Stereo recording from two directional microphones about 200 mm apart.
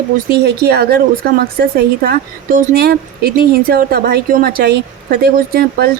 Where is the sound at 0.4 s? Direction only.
50° right (ahead or behind).